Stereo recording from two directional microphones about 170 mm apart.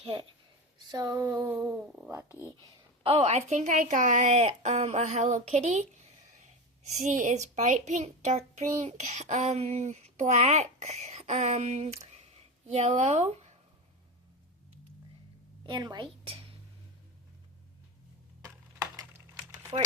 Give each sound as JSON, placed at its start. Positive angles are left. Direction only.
{"t": 0.1, "sound": "a woman's voice", "side_deg": -25}
{"t": 2.6, "sound": "a child's voice", "side_deg": -25}
{"t": 15.6, "sound": "speech", "side_deg": -25}
{"t": 18.4, "sound": "a sound", "side_deg": -20}